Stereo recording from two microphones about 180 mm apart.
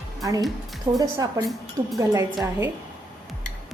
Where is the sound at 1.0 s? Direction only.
20° right (ahead or behind).